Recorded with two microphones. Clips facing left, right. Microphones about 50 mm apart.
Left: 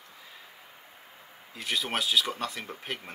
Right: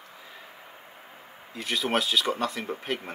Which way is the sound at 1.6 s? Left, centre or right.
Centre.